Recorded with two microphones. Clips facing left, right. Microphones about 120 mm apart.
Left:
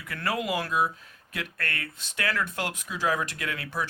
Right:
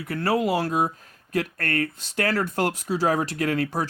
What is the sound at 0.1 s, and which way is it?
A man's voice, 35° right (ahead or behind).